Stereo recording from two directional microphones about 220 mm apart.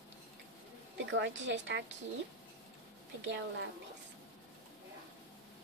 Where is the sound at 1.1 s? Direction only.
55° right (ahead or behind).